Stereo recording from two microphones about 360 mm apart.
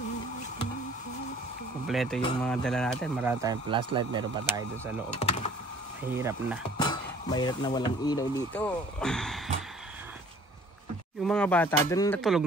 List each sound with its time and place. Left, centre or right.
1.9 s speech: centre
5.1 s speech: centre
6.1 s speech: centre
6.8 s speech: centre
11.2 s speech: centre